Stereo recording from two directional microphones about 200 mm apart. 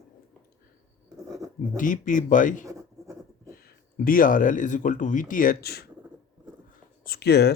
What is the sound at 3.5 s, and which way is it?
Speech, 45° left (ahead or behind).